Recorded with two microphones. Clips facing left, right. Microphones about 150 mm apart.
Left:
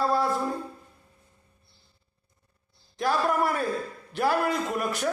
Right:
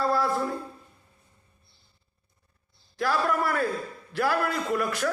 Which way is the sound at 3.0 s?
20° left (ahead or behind).